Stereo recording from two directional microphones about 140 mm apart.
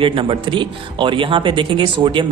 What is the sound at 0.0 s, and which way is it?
Speech, 40° right (ahead or behind).